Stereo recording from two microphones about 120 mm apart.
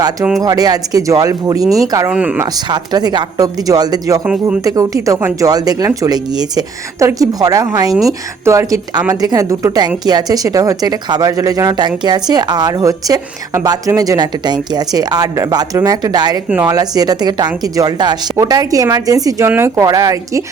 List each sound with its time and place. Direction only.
0.4 s speech: 30° right (ahead or behind)
2.0 s speech: 10° right (ahead or behind)
2.6 s speech: 35° right (ahead or behind)